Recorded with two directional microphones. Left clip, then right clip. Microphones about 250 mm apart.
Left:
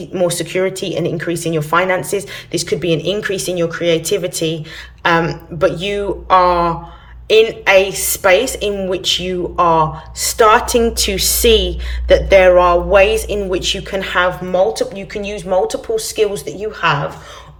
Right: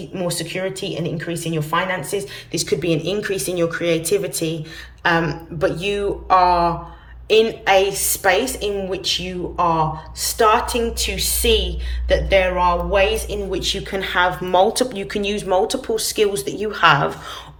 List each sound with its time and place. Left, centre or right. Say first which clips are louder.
0.1 s speech: left 8 dB; centre